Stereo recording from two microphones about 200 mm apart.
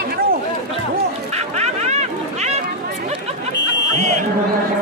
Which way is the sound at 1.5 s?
35° right (ahead or behind).